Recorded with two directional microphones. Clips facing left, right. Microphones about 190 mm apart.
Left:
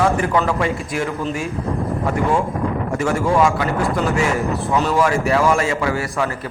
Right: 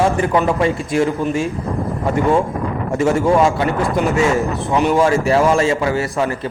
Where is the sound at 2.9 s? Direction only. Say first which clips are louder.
Right 4 dB; 25° right (ahead or behind).